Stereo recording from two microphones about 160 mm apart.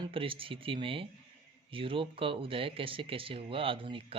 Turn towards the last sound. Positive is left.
turn(degrees=-35)  # may be behind; listen again after turning